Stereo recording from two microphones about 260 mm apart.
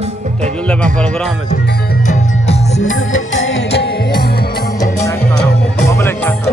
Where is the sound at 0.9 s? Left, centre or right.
Centre.